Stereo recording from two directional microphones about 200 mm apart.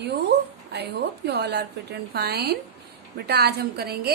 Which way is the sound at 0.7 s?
55° right (ahead or behind).